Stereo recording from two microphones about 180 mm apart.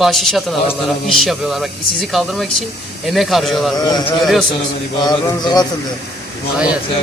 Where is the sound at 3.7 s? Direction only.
20° left (ahead or behind).